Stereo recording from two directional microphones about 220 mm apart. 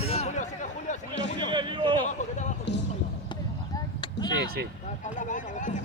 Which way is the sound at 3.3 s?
20° left (ahead or behind).